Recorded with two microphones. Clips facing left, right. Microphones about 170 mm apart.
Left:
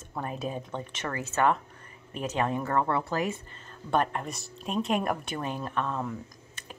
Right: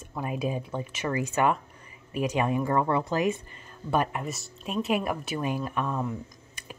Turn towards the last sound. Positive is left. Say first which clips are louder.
# right 2 dB
turn(degrees=-10)  # may be behind; listen again after turning